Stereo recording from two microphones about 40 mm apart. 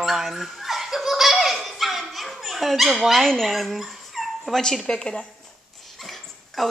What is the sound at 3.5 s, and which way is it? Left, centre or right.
Dog, centre.